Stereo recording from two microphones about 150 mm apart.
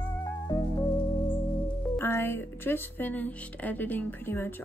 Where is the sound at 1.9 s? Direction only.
15° left (ahead or behind).